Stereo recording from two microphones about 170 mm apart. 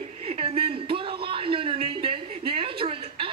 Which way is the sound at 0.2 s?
35° right (ahead or behind).